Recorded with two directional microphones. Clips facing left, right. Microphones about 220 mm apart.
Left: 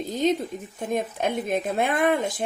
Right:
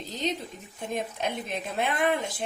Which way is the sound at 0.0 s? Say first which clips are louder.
Left 8 dB; 50° left (ahead or behind).